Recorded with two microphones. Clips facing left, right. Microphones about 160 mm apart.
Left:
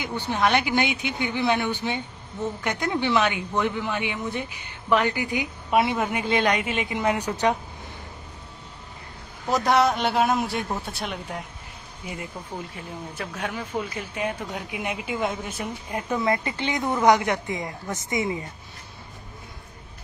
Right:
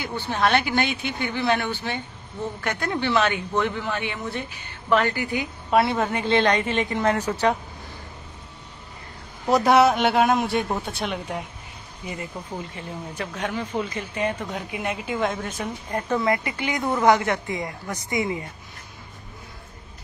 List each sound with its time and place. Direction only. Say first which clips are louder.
0.0 s speech: even; 15° left (ahead or behind)
9.5 s a man's voice: right 4 dB; centre (ahead or behind)
12.7 s speech: right 2 dB; 5° left (ahead or behind)
16.5 s a woman's voice: right 1 dB; 25° left (ahead or behind)